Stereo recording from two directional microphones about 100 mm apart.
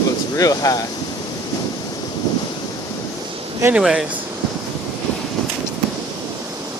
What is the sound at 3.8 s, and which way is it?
Speech, 10° right (ahead or behind).